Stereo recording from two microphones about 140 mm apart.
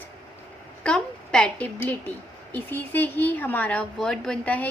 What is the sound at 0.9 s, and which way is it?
A woman's voice, 5° left (ahead or behind).